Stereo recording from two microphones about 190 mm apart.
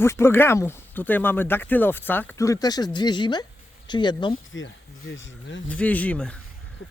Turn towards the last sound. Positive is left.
turn(degrees=5)  # may be behind; listen again after turning